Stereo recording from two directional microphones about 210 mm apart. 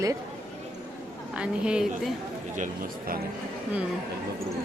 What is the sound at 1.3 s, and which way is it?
Speech, 5° right (ahead or behind).